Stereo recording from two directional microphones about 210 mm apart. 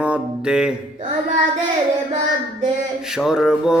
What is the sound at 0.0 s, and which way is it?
Music, 5° right (ahead or behind).